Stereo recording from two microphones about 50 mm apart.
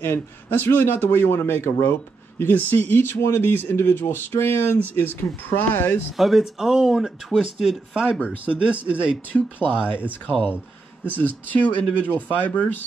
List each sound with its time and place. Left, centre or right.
0.0 s a man's voice: left
2.5 s a man's voice: left
6.1 s speech: centre
7.9 s speech: right
9.3 s speech: centre
9.7 s speech: right
10.2 s speech: left